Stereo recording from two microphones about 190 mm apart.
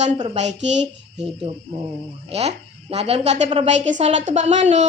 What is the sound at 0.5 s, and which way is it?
Speech, 70° right (ahead or behind).